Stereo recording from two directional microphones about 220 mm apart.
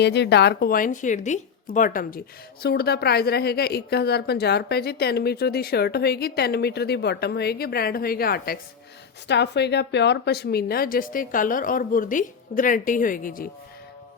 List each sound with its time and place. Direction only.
0.0 s speech: 50° left (ahead or behind)